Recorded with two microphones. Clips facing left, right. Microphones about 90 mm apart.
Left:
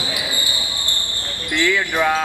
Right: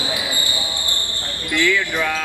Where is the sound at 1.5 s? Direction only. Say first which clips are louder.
Even; 20° left (ahead or behind).